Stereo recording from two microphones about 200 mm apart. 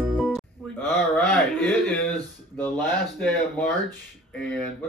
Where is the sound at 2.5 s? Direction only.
5° left (ahead or behind).